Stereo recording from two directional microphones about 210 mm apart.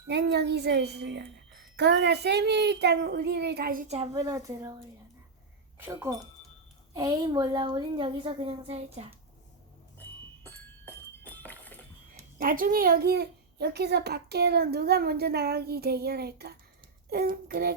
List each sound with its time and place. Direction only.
0.1 s a woman's voice: 50° right (ahead or behind)
3.8 s a woman's voice: 30° right (ahead or behind)
4.1 s speech: 15° right (ahead or behind)
5.8 s a woman's voice: 10° right (ahead or behind); by 9.1 s 30° right (ahead or behind)
10.4 s a sound: 10° left (ahead or behind)
12.4 s a woman's voice: 40° right (ahead or behind)